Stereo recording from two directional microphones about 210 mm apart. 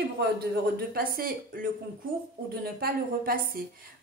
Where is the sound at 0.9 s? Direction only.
45° right (ahead or behind).